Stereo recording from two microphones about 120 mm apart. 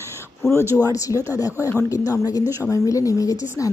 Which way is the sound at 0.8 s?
30° left (ahead or behind).